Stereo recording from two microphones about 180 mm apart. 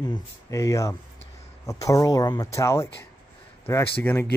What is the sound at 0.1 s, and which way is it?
Speech, 20° left (ahead or behind).